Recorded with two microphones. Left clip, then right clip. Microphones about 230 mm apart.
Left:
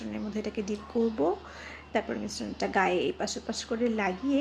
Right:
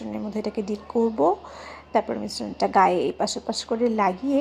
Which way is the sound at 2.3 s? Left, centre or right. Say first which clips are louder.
Right 9 dB; centre.